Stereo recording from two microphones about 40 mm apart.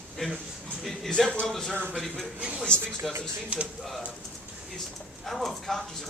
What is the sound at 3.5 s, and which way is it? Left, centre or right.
Speech, right.